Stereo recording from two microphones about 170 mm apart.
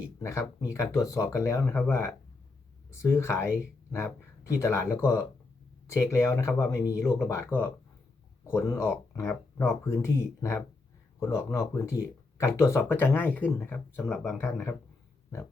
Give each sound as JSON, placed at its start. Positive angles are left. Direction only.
{"t": 0.2, "sound": "speech", "side_deg": 15}